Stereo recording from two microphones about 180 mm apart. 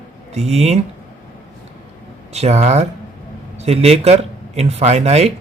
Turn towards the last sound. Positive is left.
turn(degrees=-35)  # may be behind; listen again after turning